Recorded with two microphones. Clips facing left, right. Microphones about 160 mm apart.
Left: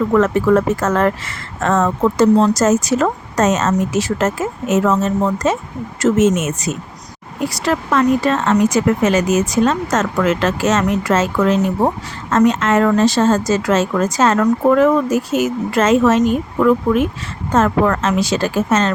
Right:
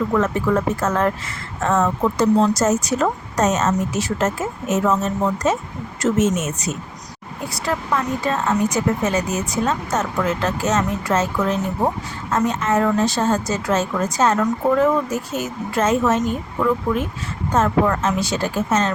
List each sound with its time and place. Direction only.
0.2 s speech: 90° left